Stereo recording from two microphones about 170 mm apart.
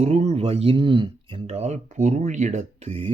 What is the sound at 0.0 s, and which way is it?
Speech, 40° right (ahead or behind).